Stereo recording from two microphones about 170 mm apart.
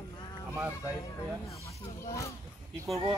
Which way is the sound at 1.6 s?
20° left (ahead or behind).